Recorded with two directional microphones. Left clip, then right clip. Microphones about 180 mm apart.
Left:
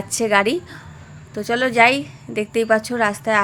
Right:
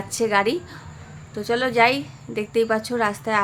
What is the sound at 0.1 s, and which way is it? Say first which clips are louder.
A woman's voice: left 3 dB; 15° left (ahead or behind).